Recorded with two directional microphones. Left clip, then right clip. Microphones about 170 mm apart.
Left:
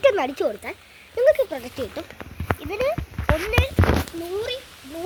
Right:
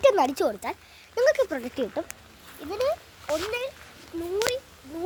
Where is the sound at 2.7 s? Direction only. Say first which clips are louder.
Left 1 dB; 10° right (ahead or behind).